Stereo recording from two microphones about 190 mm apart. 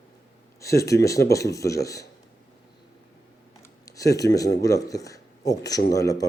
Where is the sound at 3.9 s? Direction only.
15° left (ahead or behind).